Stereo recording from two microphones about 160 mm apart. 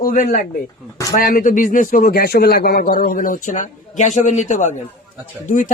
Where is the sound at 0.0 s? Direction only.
55° left (ahead or behind); by 3.0 s 70° left (ahead or behind).